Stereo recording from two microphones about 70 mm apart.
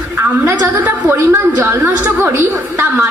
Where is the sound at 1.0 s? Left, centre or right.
Right.